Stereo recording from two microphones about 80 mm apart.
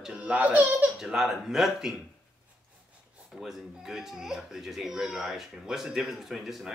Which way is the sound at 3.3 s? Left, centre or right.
Centre.